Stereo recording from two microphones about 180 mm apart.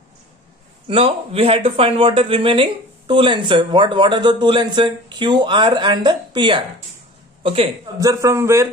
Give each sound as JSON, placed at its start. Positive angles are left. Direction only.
{"t": 0.8, "sound": "a man's voice", "side_deg": -30}
{"t": 8.0, "sound": "a man's voice", "side_deg": -15}